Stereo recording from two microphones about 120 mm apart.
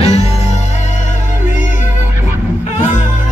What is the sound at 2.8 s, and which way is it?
Music, 80° left.